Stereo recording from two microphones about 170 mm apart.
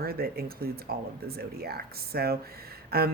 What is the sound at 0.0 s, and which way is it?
Speech, 65° right (ahead or behind).